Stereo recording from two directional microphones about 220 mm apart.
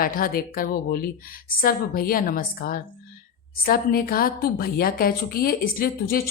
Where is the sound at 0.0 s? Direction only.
40° left (ahead or behind).